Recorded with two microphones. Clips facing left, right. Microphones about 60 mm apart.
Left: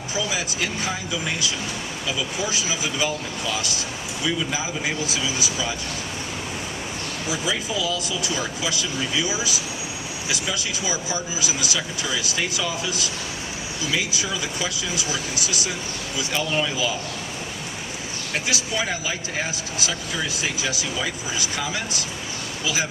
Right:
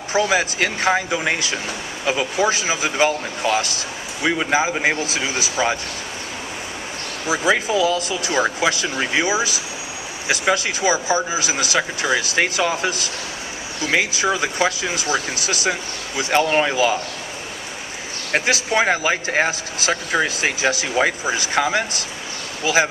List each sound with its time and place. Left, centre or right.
0.1 s speech: right
7.3 s speech: right
18.3 s speech: right